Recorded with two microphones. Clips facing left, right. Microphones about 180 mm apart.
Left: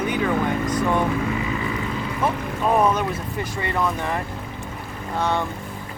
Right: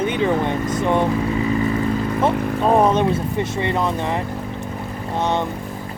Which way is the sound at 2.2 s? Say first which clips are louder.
Right 3 dB; 30° right (ahead or behind).